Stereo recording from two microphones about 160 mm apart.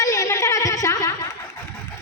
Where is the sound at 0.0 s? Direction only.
20° left (ahead or behind).